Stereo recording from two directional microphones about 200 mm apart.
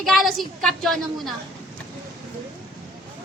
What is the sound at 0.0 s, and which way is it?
A woman's voice, centre (ahead or behind).